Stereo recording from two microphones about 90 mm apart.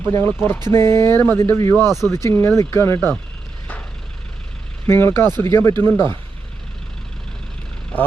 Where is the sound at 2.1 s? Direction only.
30° left (ahead or behind).